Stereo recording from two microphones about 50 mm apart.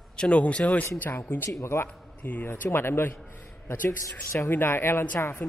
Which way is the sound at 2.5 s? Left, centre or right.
Left.